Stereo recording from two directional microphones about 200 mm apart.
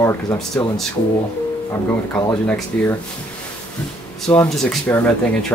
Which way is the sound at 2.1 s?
10° left (ahead or behind).